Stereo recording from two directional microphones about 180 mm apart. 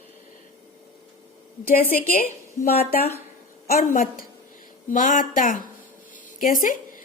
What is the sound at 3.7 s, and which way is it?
A woman's voice, 50° left (ahead or behind).